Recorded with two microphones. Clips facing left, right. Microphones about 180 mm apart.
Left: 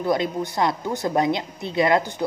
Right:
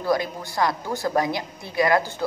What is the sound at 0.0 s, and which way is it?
A woman's voice, 20° left (ahead or behind).